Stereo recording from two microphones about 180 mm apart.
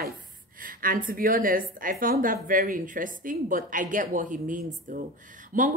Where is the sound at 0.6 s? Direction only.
50° right (ahead or behind).